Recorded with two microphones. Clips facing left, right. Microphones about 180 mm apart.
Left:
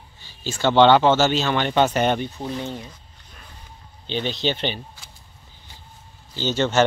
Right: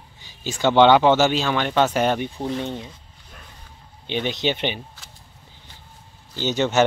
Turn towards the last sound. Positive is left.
turn(degrees=-15)  # may be behind; listen again after turning